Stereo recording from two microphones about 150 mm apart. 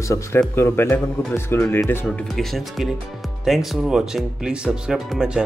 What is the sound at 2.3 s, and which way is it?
Speech, centre (ahead or behind).